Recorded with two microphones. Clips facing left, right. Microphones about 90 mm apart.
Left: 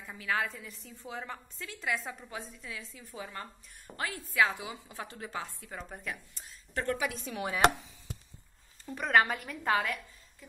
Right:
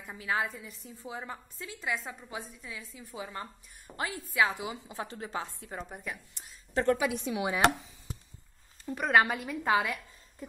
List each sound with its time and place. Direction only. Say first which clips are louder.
0.1 s a woman's voice: right 1 dB; 20° right (ahead or behind); by 2.1 s centre (ahead or behind)
2.2 s a woman's voice: right 1 dB; 10° right (ahead or behind); by 5.9 s 25° right (ahead or behind)
5.9 s a woman's voice: even; 5° right (ahead or behind)
6.3 s a woman's voice: right 9 dB; 25° right (ahead or behind)
7.3 s a woman's voice: right 3 dB; 10° right (ahead or behind)
8.8 s a woman's voice: right 1 dB; 10° right (ahead or behind)